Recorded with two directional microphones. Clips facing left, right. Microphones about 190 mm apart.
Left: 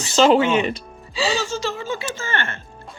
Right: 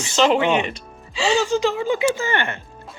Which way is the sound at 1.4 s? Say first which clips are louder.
Right 6 dB; 15° right (ahead or behind).